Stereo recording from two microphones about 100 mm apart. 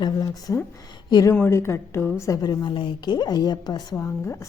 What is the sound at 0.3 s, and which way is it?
A woman's voice, 30° left (ahead or behind).